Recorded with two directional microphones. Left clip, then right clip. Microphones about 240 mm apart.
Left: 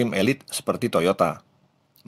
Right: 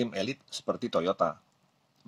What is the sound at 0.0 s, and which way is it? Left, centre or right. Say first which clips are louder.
Speech: left 10 dB; left.